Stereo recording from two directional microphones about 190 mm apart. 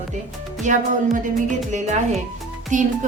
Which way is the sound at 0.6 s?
40° right (ahead or behind).